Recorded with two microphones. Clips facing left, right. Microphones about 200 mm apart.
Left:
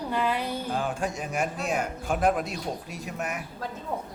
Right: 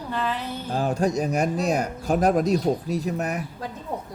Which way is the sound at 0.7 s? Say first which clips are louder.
Right 11 dB; 40° right (ahead or behind).